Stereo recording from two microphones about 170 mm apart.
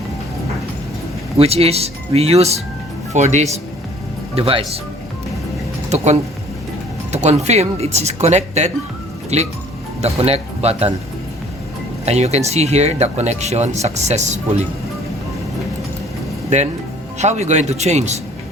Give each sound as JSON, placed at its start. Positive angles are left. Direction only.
{"t": 1.4, "sound": "speech", "side_deg": -35}
{"t": 7.1, "sound": "speech", "side_deg": -40}
{"t": 12.0, "sound": "speech", "side_deg": -40}
{"t": 16.5, "sound": "speech", "side_deg": -45}